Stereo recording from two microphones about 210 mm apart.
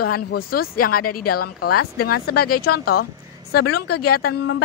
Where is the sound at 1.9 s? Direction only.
45° left (ahead or behind).